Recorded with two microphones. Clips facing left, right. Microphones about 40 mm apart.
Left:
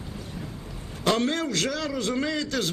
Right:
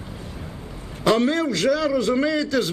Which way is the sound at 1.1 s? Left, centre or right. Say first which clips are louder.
Right 5 dB; right.